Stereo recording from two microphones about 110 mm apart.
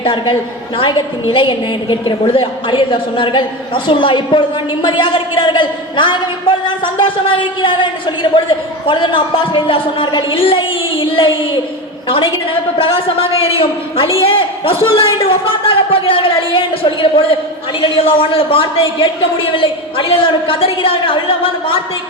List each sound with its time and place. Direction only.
0.0 s a woman's voice: 50° left (ahead or behind)